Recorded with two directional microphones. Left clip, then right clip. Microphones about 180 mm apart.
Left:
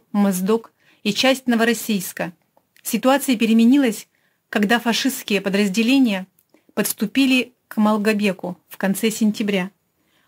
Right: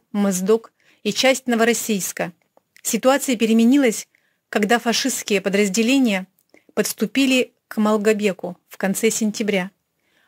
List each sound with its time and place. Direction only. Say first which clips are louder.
0.1 s speech: right 1 dB; 25° right (ahead or behind)